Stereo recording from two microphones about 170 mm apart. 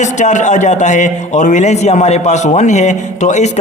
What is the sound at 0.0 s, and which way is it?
A man's voice, 45° left (ahead or behind).